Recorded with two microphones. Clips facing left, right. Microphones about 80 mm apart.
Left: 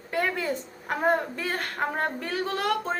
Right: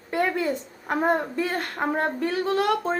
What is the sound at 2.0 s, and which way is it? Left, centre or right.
Child singing, right.